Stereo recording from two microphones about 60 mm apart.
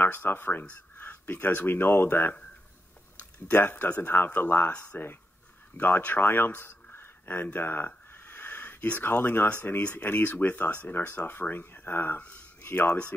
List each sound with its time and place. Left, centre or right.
0.1 s speech: left
3.4 s speech: left